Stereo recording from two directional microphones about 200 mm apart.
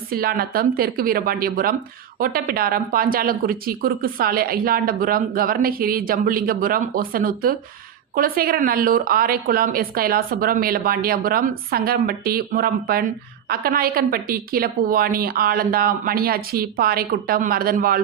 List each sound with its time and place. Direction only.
0.1 s speech: 45° right (ahead or behind)